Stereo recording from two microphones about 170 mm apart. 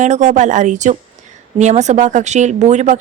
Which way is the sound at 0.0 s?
45° right (ahead or behind).